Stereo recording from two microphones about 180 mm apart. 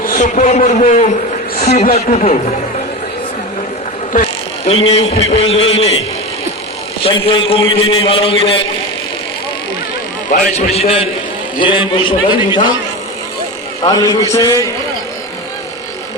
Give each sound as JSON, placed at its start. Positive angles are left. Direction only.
{"t": 0.0, "sound": "a man's voice", "side_deg": 45}
{"t": 4.1, "sound": "a man's voice", "side_deg": 40}
{"t": 7.0, "sound": "a man's voice", "side_deg": 25}
{"t": 10.3, "sound": "a man's voice", "side_deg": 45}
{"t": 13.8, "sound": "a man's voice", "side_deg": 20}